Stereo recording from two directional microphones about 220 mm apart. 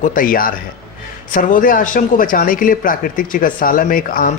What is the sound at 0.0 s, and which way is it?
Speech, 40° left (ahead or behind).